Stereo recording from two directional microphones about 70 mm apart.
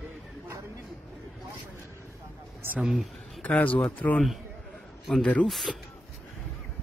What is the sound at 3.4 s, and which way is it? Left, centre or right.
Speech, left.